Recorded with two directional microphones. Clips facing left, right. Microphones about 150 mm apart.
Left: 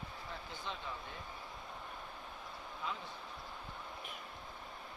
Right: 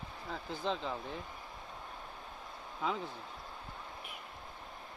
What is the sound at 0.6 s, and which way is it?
Speech, 90° right.